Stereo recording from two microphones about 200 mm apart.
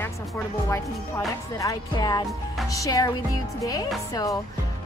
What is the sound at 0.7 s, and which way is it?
Speech, 15° left (ahead or behind).